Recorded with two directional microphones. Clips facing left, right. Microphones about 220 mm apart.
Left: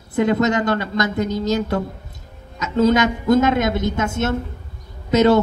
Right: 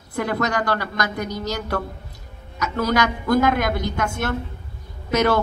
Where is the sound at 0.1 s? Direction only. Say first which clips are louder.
Left 6 dB; 20° left (ahead or behind).